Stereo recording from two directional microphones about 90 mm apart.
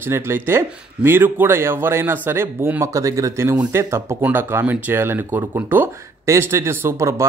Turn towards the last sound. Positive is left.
turn(degrees=-30)  # may be behind; listen again after turning